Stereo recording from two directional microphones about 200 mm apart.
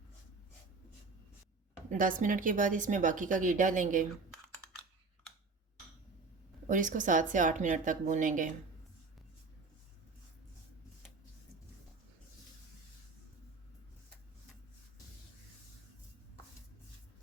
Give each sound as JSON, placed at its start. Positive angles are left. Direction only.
{"t": 1.9, "sound": "a woman's voice", "side_deg": -40}
{"t": 6.7, "sound": "a woman's voice", "side_deg": -40}